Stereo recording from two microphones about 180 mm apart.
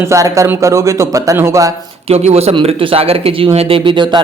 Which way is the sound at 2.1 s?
35° right (ahead or behind).